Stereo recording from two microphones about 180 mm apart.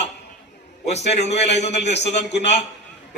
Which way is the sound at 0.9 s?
40° left (ahead or behind).